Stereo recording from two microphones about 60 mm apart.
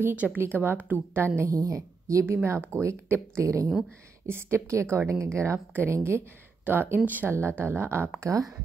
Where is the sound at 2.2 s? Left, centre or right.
Right.